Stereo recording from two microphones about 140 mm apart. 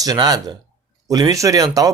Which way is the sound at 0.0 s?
25° right (ahead or behind).